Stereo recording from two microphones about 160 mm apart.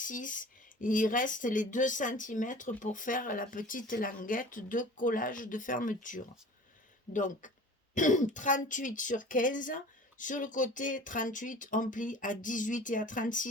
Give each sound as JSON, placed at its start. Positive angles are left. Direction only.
{"t": 0.0, "sound": "speech", "side_deg": 55}